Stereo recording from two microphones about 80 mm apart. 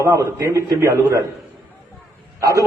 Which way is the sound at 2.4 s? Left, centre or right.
Right.